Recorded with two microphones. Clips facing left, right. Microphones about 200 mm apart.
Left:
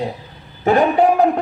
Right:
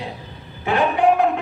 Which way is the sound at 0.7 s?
40° left (ahead or behind).